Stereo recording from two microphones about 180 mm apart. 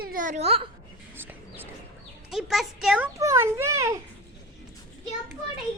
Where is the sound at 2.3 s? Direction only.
Centre (ahead or behind).